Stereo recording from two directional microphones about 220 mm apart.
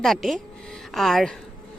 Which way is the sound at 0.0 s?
Centre (ahead or behind).